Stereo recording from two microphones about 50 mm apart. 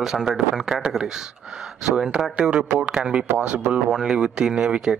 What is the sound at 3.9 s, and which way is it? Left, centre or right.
Speech, centre.